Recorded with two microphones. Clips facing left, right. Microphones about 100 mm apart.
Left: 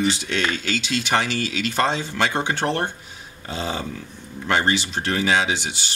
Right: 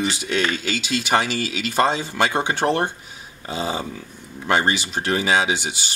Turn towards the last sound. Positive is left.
turn(degrees=-10)  # may be behind; listen again after turning